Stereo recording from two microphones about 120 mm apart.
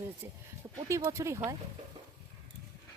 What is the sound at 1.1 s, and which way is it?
Speech, 25° right (ahead or behind).